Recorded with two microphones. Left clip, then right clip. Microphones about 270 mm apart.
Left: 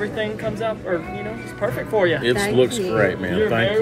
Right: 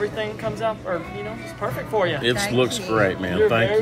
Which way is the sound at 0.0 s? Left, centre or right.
Right.